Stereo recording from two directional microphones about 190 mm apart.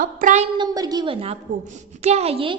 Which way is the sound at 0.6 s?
20° right (ahead or behind).